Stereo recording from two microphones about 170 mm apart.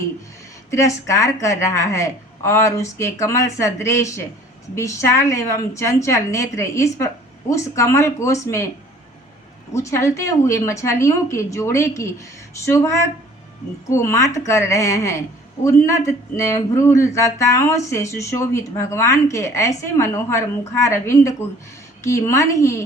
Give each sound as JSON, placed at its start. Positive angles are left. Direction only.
{"t": 0.7, "sound": "speech", "side_deg": 15}
{"t": 9.7, "sound": "speech", "side_deg": 15}